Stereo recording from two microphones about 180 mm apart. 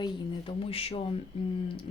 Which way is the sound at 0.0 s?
30° left (ahead or behind).